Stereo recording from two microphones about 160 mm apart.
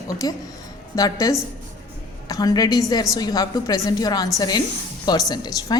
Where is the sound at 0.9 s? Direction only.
20° left (ahead or behind).